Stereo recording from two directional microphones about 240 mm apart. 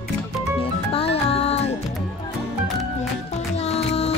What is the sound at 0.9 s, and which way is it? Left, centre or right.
Music, left.